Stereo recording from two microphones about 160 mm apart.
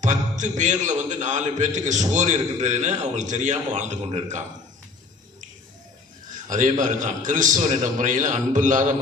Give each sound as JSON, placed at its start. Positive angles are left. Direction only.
{"t": 0.0, "sound": "a man's voice", "side_deg": -50}
{"t": 6.3, "sound": "a man's voice", "side_deg": -55}